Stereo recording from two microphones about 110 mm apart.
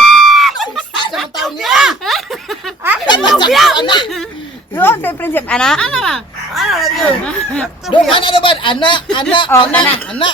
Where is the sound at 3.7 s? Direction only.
45° left (ahead or behind).